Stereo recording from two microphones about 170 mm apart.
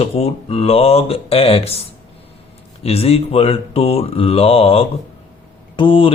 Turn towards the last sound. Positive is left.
turn(degrees=30)  # may be behind; listen again after turning